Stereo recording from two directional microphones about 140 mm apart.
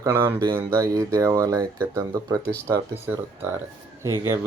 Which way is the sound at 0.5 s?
20° right (ahead or behind).